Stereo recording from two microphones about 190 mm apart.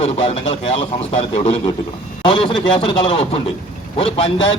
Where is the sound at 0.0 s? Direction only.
30° left (ahead or behind).